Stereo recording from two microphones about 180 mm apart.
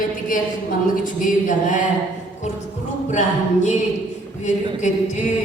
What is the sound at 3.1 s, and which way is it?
Speech, 40° left (ahead or behind).